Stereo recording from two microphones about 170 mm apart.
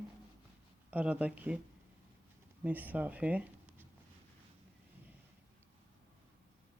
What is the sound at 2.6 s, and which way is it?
Speech, 10° right (ahead or behind).